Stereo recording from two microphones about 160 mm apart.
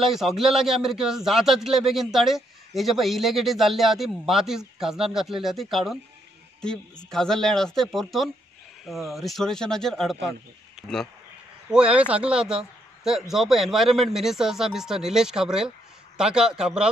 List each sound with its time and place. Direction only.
0.0 s a man's voice: centre (ahead or behind)
7.1 s a man's voice: 5° left (ahead or behind)